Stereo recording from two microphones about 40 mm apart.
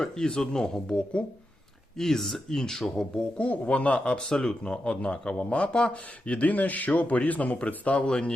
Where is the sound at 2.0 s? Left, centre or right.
Centre.